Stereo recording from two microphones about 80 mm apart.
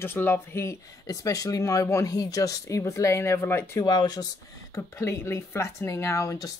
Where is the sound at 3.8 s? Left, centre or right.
Left.